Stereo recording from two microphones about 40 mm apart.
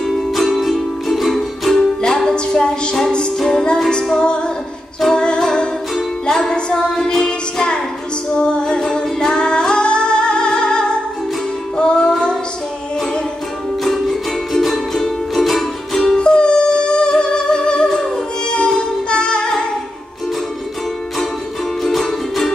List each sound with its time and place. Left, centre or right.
0.1 s music: centre
2.0 s music: centre
8.4 s humming: left
11.7 s music: left
14.0 s music: centre
16.2 s music: left